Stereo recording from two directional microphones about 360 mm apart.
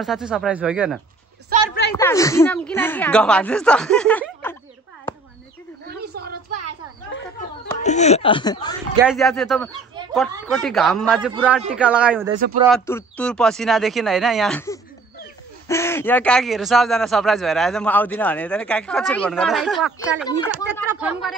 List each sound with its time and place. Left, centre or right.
0.0 s a man's voice: centre
1.5 s a sound: right
2.0 s a man's voice: centre
5.9 s a sound: right
7.8 s speech: centre
9.0 s a man's voice: centre